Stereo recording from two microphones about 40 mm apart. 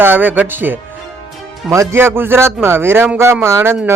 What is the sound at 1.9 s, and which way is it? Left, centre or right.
Speech, right.